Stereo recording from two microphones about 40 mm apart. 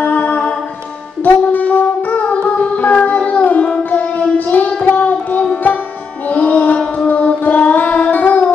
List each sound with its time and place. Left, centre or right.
0.0 s music: left
2.4 s music: left
4.8 s music: left